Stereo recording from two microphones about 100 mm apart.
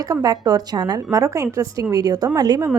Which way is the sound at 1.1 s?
30° right (ahead or behind).